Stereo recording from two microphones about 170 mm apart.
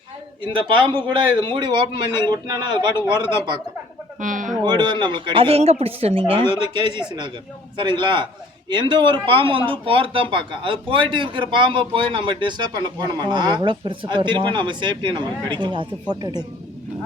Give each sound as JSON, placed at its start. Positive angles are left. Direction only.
{"t": 0.4, "sound": "speech", "side_deg": -30}
{"t": 4.2, "sound": "speech", "side_deg": -50}
{"t": 4.6, "sound": "speech", "side_deg": -25}